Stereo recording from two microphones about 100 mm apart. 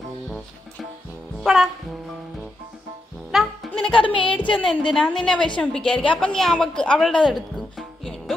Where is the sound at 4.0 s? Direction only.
60° left (ahead or behind).